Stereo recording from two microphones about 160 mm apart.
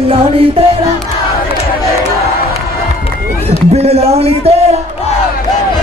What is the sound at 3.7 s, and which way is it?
A man's voice, 40° right (ahead or behind).